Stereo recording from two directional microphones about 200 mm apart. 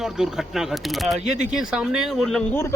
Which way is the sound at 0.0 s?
Centre (ahead or behind).